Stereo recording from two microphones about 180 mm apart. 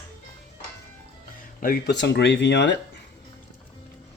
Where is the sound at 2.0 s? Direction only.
75° left (ahead or behind).